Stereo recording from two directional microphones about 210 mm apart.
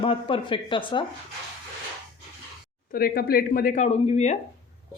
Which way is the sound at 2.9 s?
45° left (ahead or behind).